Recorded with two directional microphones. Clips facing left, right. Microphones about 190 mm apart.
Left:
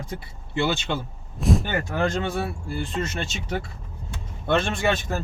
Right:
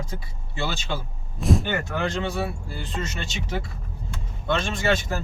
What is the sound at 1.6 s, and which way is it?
Speech, 45° left (ahead or behind).